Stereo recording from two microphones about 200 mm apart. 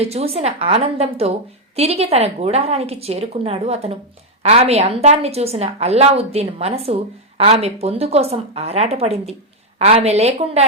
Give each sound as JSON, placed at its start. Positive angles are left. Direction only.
{"t": 0.0, "sound": "a woman's voice", "side_deg": -30}